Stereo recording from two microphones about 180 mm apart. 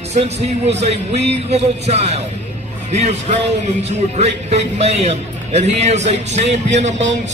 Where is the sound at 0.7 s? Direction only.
40° right (ahead or behind).